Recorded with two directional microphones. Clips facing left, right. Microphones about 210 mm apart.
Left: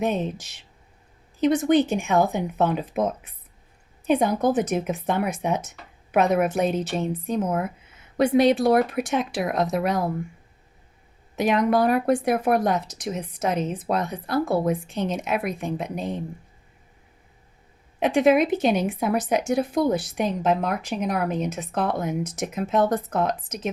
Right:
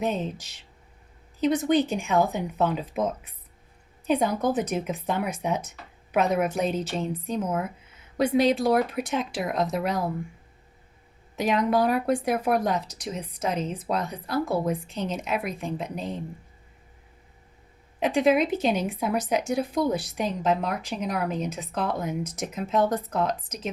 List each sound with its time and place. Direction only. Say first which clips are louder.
1.5 s speech: left 4 dB; 50° left (ahead or behind)
4.0 s a woman's voice: left 3 dB; 50° left (ahead or behind)
11.3 s a woman's voice: left 3 dB; 50° left (ahead or behind)
18.0 s a woman's voice: left 3 dB; 60° left (ahead or behind)